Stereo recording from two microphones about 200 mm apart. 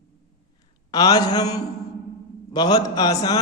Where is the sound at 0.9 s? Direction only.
20° left (ahead or behind).